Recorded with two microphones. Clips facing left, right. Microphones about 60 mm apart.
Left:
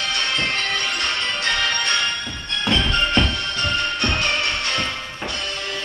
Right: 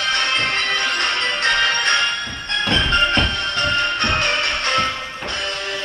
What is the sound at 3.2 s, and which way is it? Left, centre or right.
Music, right.